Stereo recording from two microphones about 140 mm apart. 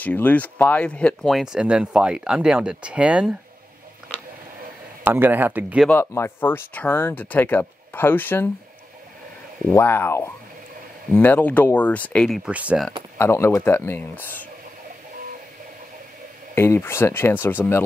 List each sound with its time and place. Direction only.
0.0 s speech: 10° left (ahead or behind); by 3.3 s 10° right (ahead or behind)
5.0 s speech: 15° right (ahead or behind)
5.9 s speech: 15° left (ahead or behind)
9.7 s speech: 15° left (ahead or behind)
12.4 s speech: 10° right (ahead or behind)
13.2 s speech: 20° left (ahead or behind)
16.5 s speech: 15° left (ahead or behind)